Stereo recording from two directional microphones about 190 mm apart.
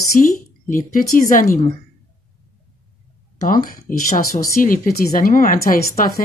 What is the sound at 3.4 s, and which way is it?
Speech, 50° left (ahead or behind).